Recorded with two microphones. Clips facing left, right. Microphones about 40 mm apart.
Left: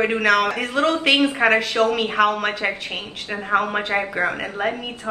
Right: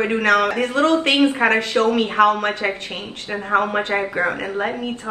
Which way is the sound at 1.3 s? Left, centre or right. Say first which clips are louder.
Even; centre.